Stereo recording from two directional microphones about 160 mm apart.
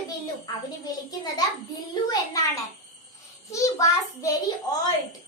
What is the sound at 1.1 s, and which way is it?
A child's voice, 25° left (ahead or behind).